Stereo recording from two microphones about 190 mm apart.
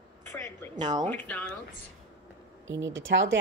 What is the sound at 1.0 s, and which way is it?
Speech, 10° left (ahead or behind).